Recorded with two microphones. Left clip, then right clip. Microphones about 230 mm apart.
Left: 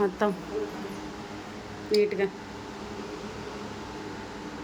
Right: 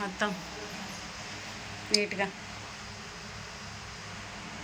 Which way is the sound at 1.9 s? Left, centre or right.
Centre.